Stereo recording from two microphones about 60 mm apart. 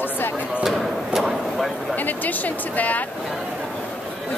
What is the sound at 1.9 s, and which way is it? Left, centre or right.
Speech, left.